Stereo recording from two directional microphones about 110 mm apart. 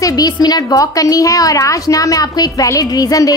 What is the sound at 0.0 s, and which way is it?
A woman's voice, 35° left (ahead or behind).